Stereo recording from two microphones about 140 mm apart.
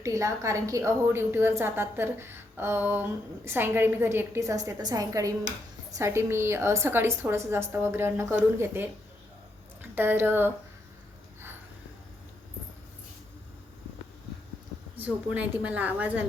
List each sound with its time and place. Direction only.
0.0 s a woman's voice: 20° right (ahead or behind)
9.9 s a woman's voice: 15° right (ahead or behind)
14.9 s a woman's voice: 10° right (ahead or behind)